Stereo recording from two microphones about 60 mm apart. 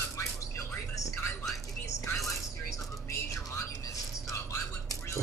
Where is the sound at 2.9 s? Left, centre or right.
Left.